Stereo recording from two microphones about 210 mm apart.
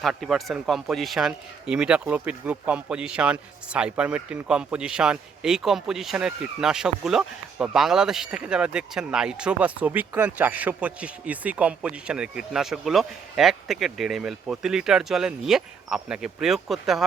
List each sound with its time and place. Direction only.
0.0 s a man's voice: centre (ahead or behind)